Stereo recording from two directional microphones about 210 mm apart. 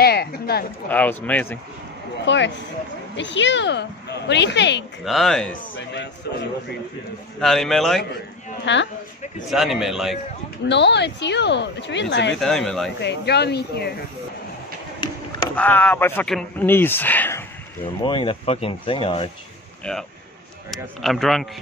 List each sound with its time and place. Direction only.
0.0 s a sound: 50° left (ahead or behind)
0.8 s speech: 10° left (ahead or behind)
2.2 s speech: 60° left (ahead or behind)
5.0 s a man's voice: centre (ahead or behind)
7.3 s a man's voice: centre (ahead or behind)
8.7 s speech: 60° left (ahead or behind)
9.5 s a man's voice: centre (ahead or behind)
10.7 s speech: 55° left (ahead or behind)
12.4 s a man's voice: centre (ahead or behind)
13.0 s speech: 55° left (ahead or behind)
15.5 s speech: 10° left (ahead or behind)
18.0 s speech: 25° left (ahead or behind)
19.8 s a man's voice: 5° left (ahead or behind)